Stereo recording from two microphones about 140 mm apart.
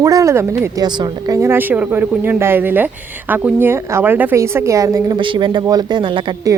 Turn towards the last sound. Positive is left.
turn(degrees=-35)  # may be behind; listen again after turning